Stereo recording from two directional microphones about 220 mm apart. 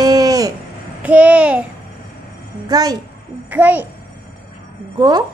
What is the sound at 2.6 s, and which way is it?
A woman's voice, 15° right (ahead or behind).